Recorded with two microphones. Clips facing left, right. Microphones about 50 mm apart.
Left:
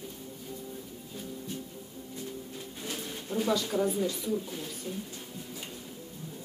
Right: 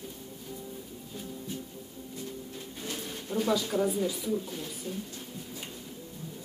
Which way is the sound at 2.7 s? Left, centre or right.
Centre.